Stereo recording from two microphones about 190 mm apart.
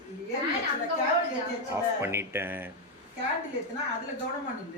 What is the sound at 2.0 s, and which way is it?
Speech, 10° right (ahead or behind).